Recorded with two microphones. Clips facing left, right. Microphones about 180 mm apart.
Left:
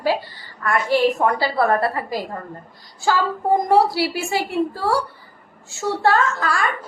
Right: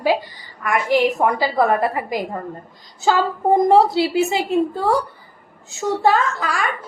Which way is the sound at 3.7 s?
20° right (ahead or behind).